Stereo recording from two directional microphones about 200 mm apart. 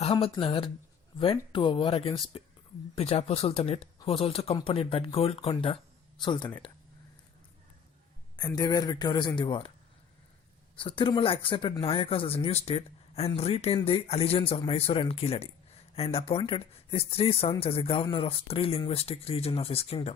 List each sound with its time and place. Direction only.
0.0 s speech: 25° left (ahead or behind)
8.4 s speech: 20° left (ahead or behind)
10.8 s speech: 25° left (ahead or behind)